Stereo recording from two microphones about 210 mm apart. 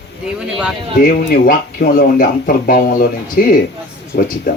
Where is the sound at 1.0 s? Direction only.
45° left (ahead or behind).